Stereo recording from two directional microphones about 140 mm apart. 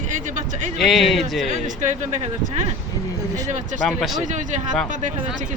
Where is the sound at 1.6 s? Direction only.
65° right (ahead or behind).